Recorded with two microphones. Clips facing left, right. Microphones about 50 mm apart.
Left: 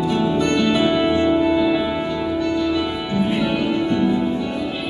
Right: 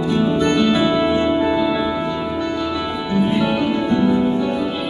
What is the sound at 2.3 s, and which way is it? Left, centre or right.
Music, centre.